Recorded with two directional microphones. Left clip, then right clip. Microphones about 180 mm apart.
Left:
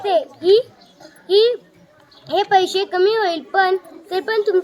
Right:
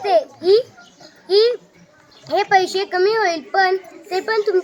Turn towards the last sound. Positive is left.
turn(degrees=0)  # may be behind; listen again after turning